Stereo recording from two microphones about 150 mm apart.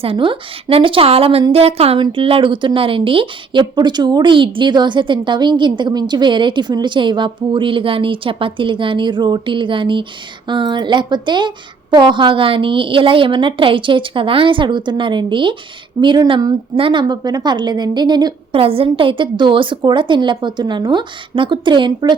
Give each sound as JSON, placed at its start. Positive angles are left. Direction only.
{"t": 0.0, "sound": "a woman's voice", "side_deg": -35}